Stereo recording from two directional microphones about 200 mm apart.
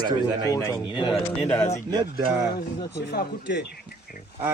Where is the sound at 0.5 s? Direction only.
15° left (ahead or behind).